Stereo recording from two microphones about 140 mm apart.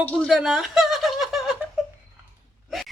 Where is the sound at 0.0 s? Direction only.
5° left (ahead or behind).